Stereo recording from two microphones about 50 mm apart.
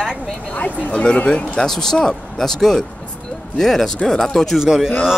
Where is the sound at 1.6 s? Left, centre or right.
Centre.